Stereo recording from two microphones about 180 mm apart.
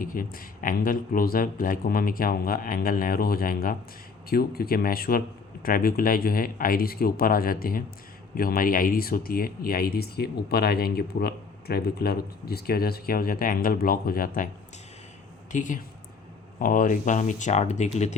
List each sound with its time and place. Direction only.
0.0 s speech: 50° left (ahead or behind)
15.5 s speech: 45° left (ahead or behind)